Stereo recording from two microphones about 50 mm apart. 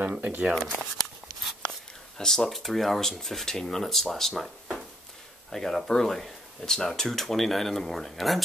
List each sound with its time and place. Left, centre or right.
0.0 s shuffling cards: right
0.4 s speech: centre
2.1 s speech: centre
4.4 s a sound: centre
5.5 s speech: centre